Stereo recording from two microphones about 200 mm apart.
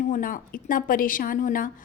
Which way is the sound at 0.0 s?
40° left (ahead or behind).